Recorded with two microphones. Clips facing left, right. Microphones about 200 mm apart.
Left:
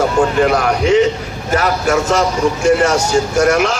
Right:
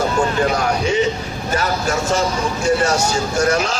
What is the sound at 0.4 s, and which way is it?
Speech, 90° left.